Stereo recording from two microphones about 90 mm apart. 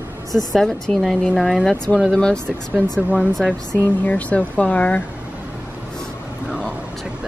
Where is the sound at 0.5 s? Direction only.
5° left (ahead or behind).